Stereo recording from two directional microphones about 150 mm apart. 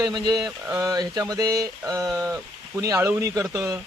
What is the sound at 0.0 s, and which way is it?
Speech, 25° right (ahead or behind).